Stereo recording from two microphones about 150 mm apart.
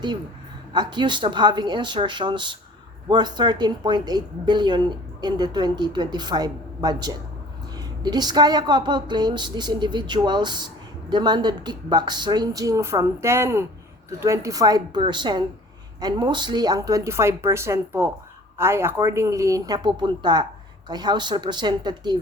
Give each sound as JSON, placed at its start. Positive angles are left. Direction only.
{"t": 0.7, "sound": "speech", "side_deg": -30}